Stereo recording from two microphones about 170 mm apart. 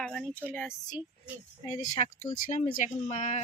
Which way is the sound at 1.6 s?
40° left (ahead or behind).